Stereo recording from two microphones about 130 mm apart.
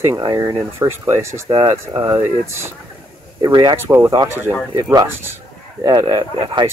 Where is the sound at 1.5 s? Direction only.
40° right (ahead or behind).